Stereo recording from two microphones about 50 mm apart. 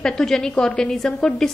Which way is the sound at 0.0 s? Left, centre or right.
Centre.